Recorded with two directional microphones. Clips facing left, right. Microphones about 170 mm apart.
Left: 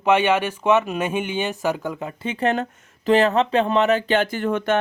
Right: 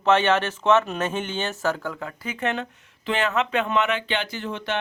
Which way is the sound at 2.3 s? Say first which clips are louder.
Left 6 dB; 40° left (ahead or behind).